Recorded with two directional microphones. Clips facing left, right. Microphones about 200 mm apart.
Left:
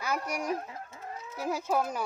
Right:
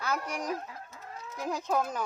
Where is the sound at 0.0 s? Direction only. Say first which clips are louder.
Left 1 dB; 10° left (ahead or behind).